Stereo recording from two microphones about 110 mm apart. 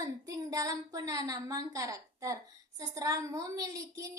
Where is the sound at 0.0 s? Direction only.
35° right (ahead or behind).